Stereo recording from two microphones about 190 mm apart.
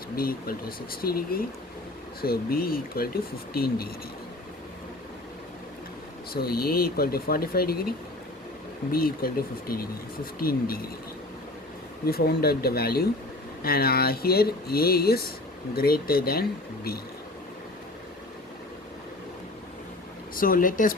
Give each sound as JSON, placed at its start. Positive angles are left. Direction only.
{"t": 0.2, "sound": "speech", "side_deg": 50}
{"t": 6.3, "sound": "speech", "side_deg": 55}
{"t": 12.0, "sound": "speech", "side_deg": 55}
{"t": 20.3, "sound": "speech", "side_deg": 50}